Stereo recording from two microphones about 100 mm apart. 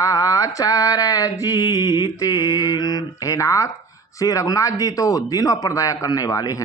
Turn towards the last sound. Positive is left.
turn(degrees=35)  # may be behind; listen again after turning